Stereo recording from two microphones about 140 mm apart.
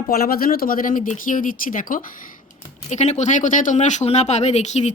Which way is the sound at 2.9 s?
55° left (ahead or behind).